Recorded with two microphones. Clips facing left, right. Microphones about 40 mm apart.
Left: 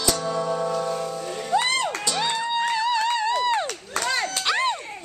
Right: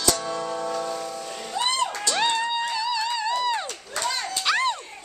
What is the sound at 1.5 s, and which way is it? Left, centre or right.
Music, left.